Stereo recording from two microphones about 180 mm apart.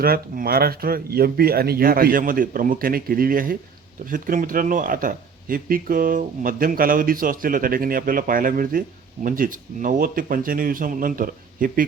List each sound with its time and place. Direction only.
0.0 s speech: 55° right (ahead or behind)